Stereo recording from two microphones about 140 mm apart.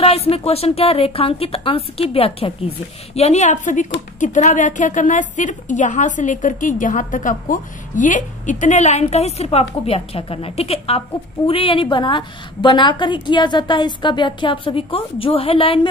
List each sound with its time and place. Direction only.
0.0 s a woman's voice: 45° left (ahead or behind)